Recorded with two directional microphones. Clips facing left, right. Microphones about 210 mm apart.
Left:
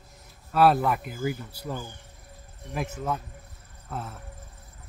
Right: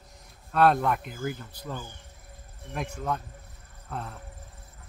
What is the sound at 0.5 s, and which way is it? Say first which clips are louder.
Speech: left 1 dB; 5° left (ahead or behind).